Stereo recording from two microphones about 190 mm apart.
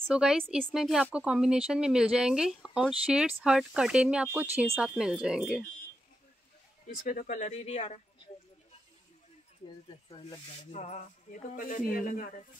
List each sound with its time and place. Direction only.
0.0 s speech: 5° right (ahead or behind)
7.1 s speech: 40° left (ahead or behind)
10.0 s speech: 25° left (ahead or behind)
10.7 s speech: 35° left (ahead or behind)